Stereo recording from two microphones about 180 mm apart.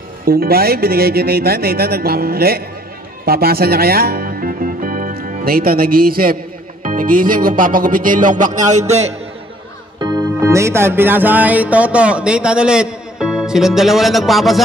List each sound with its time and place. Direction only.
0.2 s speech: 55° right (ahead or behind); by 9.1 s 40° right (ahead or behind)
9.9 s music: 25° right (ahead or behind); by 14.6 s centre (ahead or behind)